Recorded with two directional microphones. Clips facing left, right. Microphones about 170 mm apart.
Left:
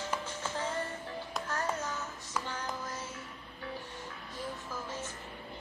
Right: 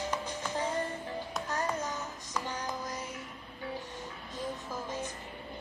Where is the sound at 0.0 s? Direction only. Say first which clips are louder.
Right 2 dB; 15° right (ahead or behind).